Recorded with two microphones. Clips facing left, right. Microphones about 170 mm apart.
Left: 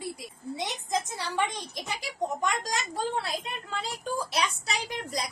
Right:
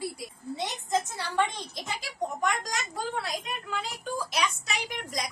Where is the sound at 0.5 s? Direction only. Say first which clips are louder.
Right 2 dB; 15° left (ahead or behind).